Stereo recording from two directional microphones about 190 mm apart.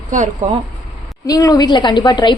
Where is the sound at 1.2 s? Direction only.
20° left (ahead or behind).